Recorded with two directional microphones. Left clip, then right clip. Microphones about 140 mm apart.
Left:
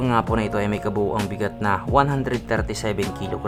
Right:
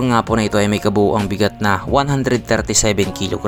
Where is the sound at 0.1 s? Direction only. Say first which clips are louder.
Right 5 dB; 40° right (ahead or behind).